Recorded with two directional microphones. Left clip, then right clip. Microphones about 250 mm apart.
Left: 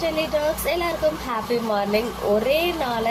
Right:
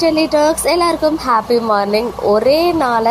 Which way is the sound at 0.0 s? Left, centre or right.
Right.